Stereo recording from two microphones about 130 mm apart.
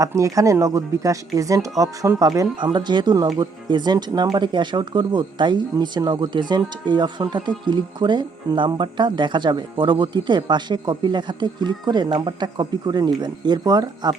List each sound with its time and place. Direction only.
0.0 s speech: 25° right (ahead or behind)